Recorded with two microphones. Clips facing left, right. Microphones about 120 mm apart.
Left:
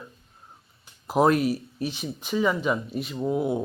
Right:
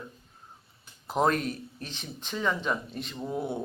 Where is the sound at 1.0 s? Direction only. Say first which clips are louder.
Left 6 dB; 5° left (ahead or behind).